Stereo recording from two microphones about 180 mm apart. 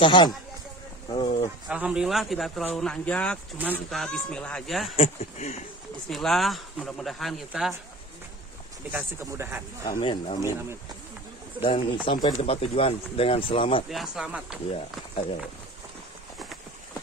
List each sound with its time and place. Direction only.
0.0 s speech: 25° left (ahead or behind)
1.7 s speech: 5° right (ahead or behind)
3.5 s speech: 10° right (ahead or behind)
3.9 s speech: centre (ahead or behind)
4.9 s speech: 35° left (ahead or behind)
6.0 s speech: centre (ahead or behind)
8.9 s speech: 15° right (ahead or behind)
9.8 s speech: 25° left (ahead or behind)
11.6 s speech: 30° left (ahead or behind)
13.8 s speech: centre (ahead or behind)